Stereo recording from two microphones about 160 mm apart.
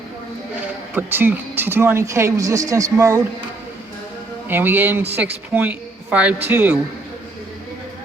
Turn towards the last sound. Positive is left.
turn(degrees=-15)  # may be behind; listen again after turning